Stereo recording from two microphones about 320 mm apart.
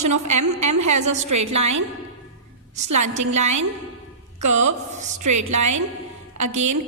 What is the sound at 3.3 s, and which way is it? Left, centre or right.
A woman's voice, right.